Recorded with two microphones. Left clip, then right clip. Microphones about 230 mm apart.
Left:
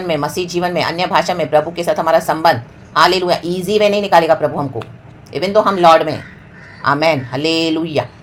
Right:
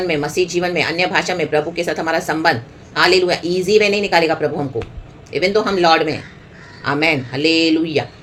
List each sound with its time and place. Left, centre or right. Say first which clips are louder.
0.1 s a woman's voice: even; centre